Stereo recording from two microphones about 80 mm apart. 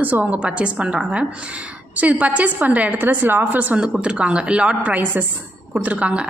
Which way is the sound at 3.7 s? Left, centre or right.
Centre.